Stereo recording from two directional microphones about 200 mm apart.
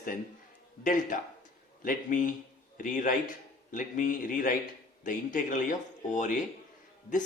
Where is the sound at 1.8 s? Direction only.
40° left (ahead or behind).